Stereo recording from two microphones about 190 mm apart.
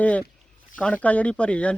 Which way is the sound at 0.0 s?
5° left (ahead or behind).